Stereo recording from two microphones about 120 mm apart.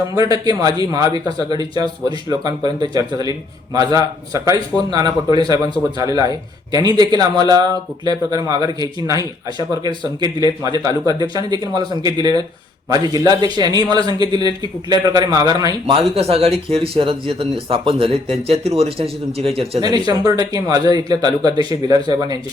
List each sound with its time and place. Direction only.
0.2 s a man's voice: 30° right (ahead or behind)
15.9 s speech: 50° right (ahead or behind)
19.8 s a man's voice: 30° right (ahead or behind)